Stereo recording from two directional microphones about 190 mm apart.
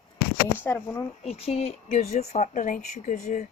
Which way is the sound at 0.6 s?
15° left (ahead or behind).